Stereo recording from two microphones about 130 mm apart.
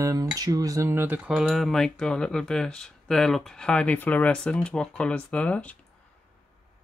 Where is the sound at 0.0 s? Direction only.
30° right (ahead or behind).